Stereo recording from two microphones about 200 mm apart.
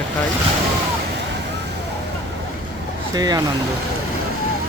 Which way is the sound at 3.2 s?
20° right (ahead or behind).